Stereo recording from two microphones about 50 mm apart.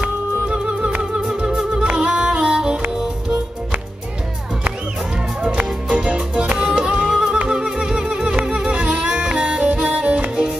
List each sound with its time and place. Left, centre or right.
0.0 s music: centre
5.9 s music: centre